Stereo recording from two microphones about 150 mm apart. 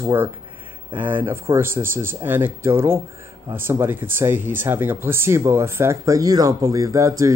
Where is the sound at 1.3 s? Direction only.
15° right (ahead or behind).